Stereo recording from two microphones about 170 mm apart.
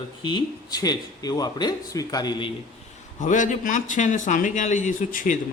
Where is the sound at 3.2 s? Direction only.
45° left (ahead or behind).